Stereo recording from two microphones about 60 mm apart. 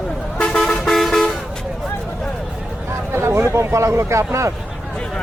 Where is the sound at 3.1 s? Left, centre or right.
Right.